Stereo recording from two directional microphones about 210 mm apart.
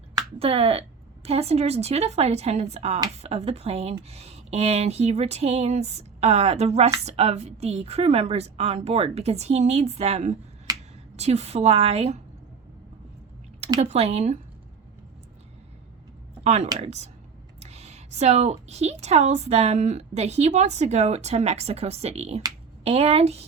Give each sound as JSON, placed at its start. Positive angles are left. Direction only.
{"t": 0.3, "sound": "a woman's voice", "side_deg": -30}
{"t": 10.7, "sound": "a sound", "side_deg": -20}
{"t": 11.2, "sound": "speech", "side_deg": -30}
{"t": 13.7, "sound": "speech", "side_deg": -30}
{"t": 16.4, "sound": "a woman's voice", "side_deg": -30}